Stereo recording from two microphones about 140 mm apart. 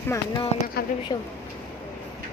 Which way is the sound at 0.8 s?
90° left.